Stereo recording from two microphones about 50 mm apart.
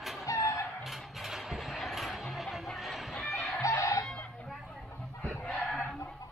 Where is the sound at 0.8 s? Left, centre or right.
Centre.